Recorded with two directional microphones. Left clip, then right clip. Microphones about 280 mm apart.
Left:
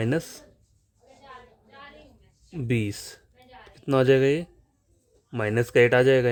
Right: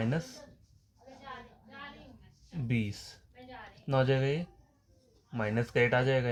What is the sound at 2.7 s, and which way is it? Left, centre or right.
Speech, left.